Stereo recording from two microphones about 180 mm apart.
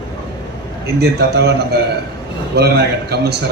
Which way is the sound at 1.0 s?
65° right (ahead or behind).